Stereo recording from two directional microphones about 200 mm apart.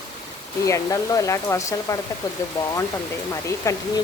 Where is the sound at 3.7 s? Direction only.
15° left (ahead or behind).